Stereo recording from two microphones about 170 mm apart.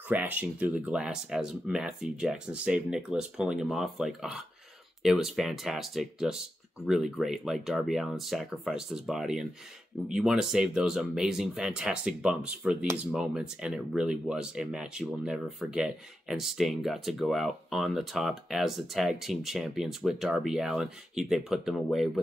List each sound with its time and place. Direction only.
0.1 s speech: 10° right (ahead or behind)